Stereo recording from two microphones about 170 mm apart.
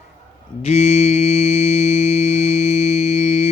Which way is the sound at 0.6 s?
40° left (ahead or behind).